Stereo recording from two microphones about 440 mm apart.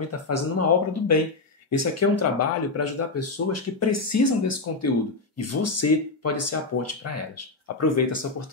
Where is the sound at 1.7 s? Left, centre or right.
Left.